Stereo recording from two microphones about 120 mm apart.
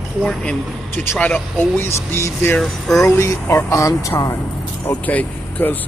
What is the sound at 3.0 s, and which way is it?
Speech, 25° left (ahead or behind).